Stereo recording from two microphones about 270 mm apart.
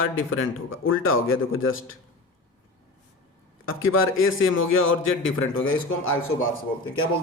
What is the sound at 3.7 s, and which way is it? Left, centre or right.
A man's voice, left.